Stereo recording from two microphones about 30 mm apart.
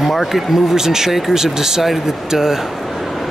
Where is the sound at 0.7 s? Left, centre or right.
Centre.